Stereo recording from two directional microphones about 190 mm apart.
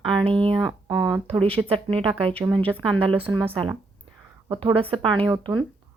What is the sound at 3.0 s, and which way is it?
Speech, 30° right (ahead or behind).